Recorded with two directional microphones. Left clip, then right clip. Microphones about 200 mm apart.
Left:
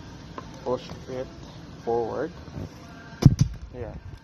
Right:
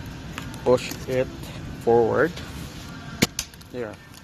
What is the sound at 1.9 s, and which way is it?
Speech, 25° right (ahead or behind).